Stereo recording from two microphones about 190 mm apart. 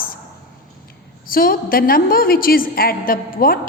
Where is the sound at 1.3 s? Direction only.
50° left (ahead or behind).